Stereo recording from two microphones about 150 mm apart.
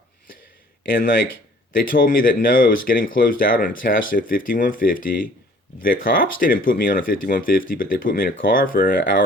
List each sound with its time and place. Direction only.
1.9 s speech: 70° left (ahead or behind)